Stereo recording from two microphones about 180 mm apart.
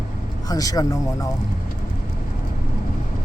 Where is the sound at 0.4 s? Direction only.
20° left (ahead or behind).